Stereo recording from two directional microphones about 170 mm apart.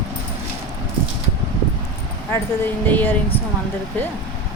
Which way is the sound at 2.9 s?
10° left (ahead or behind).